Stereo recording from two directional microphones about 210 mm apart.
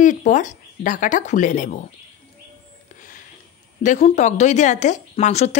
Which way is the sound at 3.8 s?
35° left (ahead or behind).